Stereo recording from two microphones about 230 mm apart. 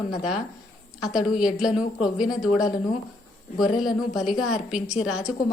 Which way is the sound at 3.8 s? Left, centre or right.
Centre.